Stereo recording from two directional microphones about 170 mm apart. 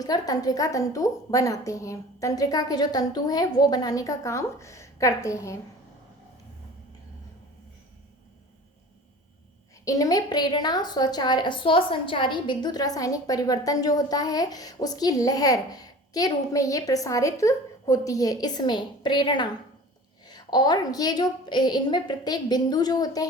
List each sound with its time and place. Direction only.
0.0 s a woman's voice: 20° left (ahead or behind)
9.8 s a woman's voice: 20° left (ahead or behind)